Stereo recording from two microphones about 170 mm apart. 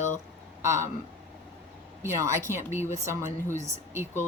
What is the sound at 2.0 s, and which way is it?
Speech, 15° right (ahead or behind).